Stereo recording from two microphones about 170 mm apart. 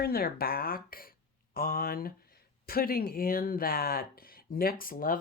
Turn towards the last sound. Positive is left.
turn(degrees=55)  # may be behind; listen again after turning